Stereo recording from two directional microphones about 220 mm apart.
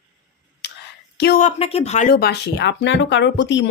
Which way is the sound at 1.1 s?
45° left (ahead or behind).